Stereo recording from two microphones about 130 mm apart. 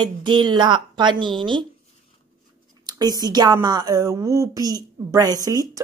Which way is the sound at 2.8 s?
30° right (ahead or behind).